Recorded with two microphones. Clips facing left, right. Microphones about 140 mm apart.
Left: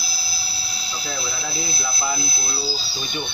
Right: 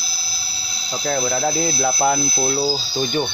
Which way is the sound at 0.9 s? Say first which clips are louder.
Right 10 dB; 60° right (ahead or behind).